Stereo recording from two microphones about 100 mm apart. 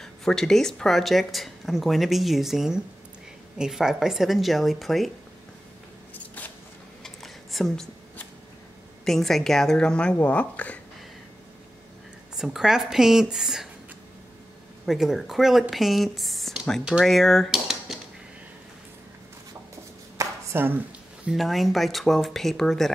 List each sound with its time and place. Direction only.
0.0 s speech: 5° left (ahead or behind)
7.0 s a sound: centre (ahead or behind)
9.0 s speech: 5° left (ahead or behind)
12.4 s speech: 5° right (ahead or behind)
14.9 s speech: 5° right (ahead or behind)
17.0 s cutlery: centre (ahead or behind)
20.2 s a sound: 20° right (ahead or behind)
21.3 s speech: centre (ahead or behind)